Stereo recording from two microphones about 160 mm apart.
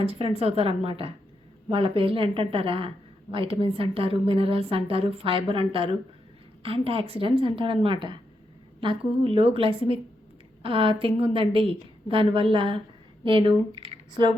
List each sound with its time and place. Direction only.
0.0 s a woman's voice: 40° right (ahead or behind)